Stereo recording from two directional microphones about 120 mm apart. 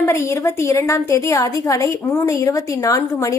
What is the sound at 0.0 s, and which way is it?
A woman's voice, 25° left (ahead or behind).